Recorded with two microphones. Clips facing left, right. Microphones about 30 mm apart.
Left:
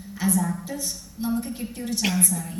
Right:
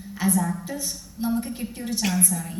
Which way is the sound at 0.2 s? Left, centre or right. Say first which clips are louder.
Right 1 dB; centre.